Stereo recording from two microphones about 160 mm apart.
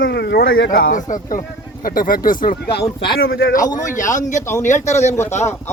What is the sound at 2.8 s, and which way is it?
Speech, 30° left (ahead or behind).